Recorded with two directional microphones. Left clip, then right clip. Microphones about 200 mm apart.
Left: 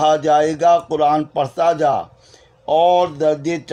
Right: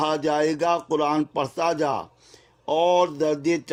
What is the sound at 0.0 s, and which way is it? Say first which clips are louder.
Speech: left 8 dB; 55° right (ahead or behind).